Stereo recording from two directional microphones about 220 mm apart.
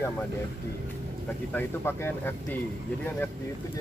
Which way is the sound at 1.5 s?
10° left (ahead or behind).